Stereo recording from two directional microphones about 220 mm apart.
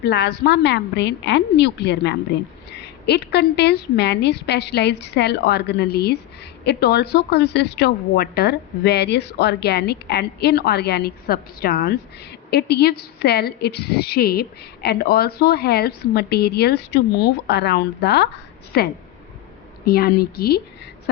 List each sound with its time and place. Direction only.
0.0 s a woman's voice: 50° left (ahead or behind)